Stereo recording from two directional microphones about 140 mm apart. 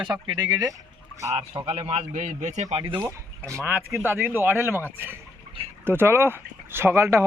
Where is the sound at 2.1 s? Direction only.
60° right (ahead or behind).